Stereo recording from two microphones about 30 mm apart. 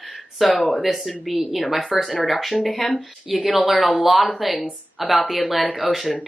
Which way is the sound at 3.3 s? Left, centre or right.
Centre.